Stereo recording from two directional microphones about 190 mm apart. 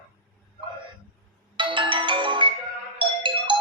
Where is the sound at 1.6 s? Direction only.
25° right (ahead or behind).